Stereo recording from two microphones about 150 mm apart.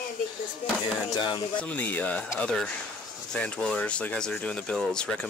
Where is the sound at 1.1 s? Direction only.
30° left (ahead or behind).